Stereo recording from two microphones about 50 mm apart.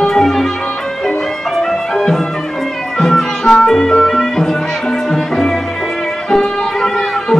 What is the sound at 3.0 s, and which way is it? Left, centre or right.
Music, centre.